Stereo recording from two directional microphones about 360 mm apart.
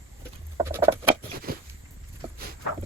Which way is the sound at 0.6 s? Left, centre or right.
Centre.